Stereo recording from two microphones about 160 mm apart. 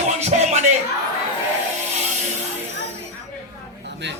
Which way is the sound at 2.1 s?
45° right (ahead or behind).